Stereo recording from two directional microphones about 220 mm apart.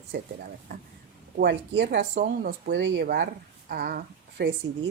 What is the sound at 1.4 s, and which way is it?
Speech, 55° right (ahead or behind).